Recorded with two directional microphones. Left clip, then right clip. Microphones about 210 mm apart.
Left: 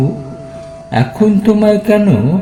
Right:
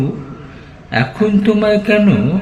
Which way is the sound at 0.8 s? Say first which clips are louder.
Left 2 dB; 35° left (ahead or behind).